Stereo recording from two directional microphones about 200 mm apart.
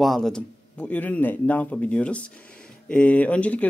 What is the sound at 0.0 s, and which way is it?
Speech, centre (ahead or behind).